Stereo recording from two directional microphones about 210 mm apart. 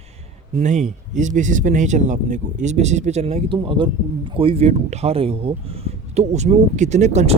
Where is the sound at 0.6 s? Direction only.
35° right (ahead or behind).